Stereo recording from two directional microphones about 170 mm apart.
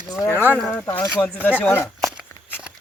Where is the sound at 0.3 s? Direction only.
10° right (ahead or behind).